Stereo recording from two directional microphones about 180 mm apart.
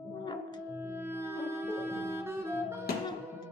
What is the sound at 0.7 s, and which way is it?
Music, 10° right (ahead or behind).